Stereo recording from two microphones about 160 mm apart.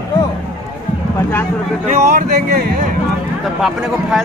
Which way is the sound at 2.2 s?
65° right (ahead or behind).